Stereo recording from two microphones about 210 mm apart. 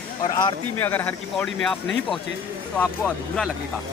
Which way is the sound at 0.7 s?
10° left (ahead or behind).